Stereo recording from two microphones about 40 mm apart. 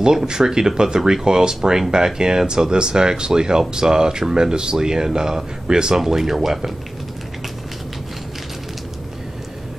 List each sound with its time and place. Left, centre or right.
0.0 s speech: centre